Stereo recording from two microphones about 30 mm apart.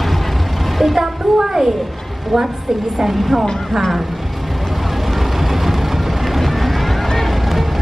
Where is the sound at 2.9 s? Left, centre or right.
Centre.